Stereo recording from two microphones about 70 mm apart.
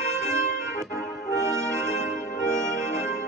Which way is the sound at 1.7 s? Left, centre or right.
Right.